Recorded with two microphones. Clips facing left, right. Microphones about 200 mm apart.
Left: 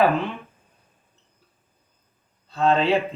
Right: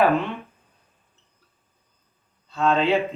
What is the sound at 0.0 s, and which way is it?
Speech, centre (ahead or behind).